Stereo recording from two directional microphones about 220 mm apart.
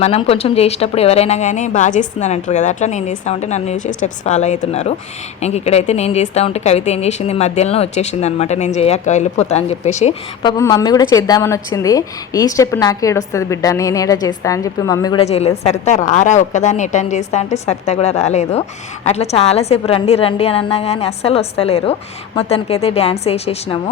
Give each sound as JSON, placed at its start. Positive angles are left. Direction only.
{"t": 0.0, "sound": "a woman's voice", "side_deg": 25}
{"t": 10.6, "sound": "a woman's voice", "side_deg": 15}
{"t": 15.2, "sound": "a woman's voice", "side_deg": 30}